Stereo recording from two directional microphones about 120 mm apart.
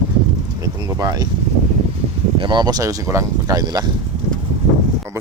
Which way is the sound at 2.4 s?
40° right (ahead or behind).